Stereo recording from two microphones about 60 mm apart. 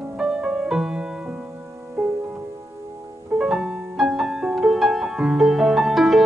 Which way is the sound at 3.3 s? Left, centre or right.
Centre.